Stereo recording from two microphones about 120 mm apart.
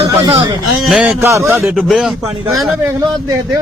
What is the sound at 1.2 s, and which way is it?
Speech, 25° right (ahead or behind).